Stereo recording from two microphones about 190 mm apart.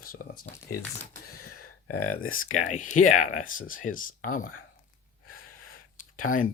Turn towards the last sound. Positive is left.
turn(degrees=45)  # may be behind; listen again after turning